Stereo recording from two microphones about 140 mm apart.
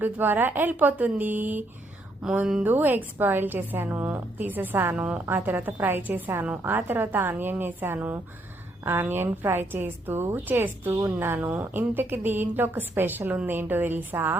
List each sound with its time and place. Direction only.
0.0 s a woman's voice: 15° right (ahead or behind)